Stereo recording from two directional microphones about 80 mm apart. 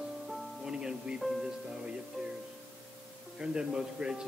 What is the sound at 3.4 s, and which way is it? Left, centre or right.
Speech, centre.